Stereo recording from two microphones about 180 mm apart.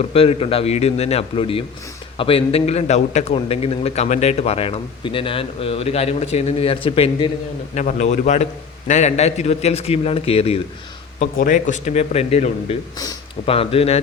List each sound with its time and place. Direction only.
0.0 s a man's voice: 35° left (ahead or behind)
7.8 s a man's voice: 40° left (ahead or behind)
11.2 s a man's voice: 45° left (ahead or behind)